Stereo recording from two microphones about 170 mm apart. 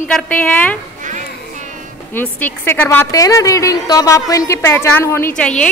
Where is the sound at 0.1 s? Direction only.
10° left (ahead or behind).